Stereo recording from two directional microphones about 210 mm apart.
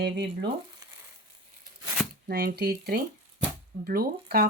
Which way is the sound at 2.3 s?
45° right (ahead or behind).